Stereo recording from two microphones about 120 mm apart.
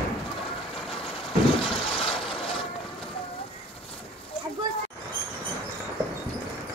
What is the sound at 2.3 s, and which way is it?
Vehicle, 50° left (ahead or behind).